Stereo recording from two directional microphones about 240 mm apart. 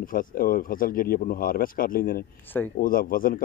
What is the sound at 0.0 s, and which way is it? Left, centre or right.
Speech, left.